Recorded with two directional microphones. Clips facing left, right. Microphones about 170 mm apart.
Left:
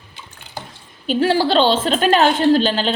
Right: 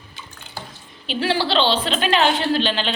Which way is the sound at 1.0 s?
45° left (ahead or behind).